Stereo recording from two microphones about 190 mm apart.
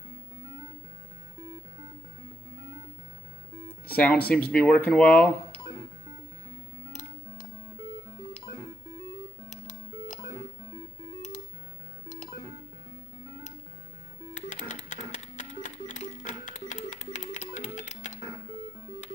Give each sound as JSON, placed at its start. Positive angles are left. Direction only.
{"t": 3.9, "sound": "speech", "side_deg": 10}
{"t": 9.5, "sound": "music", "side_deg": 40}
{"t": 14.5, "sound": "a sound", "side_deg": 40}
{"t": 14.9, "sound": "music", "side_deg": 40}